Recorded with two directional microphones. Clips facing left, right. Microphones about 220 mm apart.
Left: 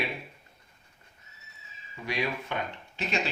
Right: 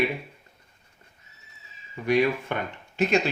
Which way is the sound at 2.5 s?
50° right (ahead or behind).